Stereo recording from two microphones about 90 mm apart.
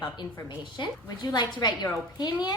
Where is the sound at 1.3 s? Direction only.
50° left (ahead or behind).